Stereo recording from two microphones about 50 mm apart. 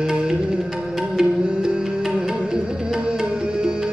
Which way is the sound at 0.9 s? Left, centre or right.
Centre.